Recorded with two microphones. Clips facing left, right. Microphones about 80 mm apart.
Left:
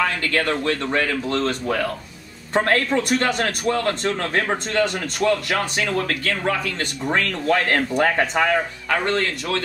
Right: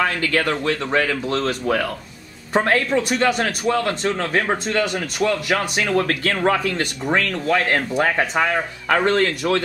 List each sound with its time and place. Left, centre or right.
0.0 s a man's voice: centre
5.9 s speech: right
6.8 s a man's voice: centre
9.0 s speech: right